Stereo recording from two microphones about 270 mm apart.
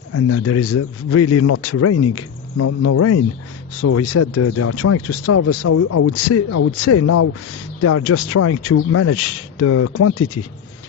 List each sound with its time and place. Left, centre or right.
0.1 s speech: left